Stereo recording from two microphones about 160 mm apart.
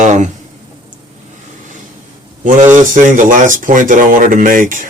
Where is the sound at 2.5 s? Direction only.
50° right (ahead or behind).